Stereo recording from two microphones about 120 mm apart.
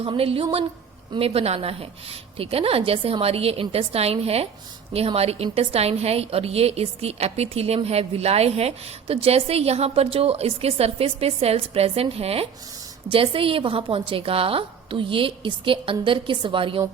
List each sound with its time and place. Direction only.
0.0 s a woman's voice: 50° right (ahead or behind)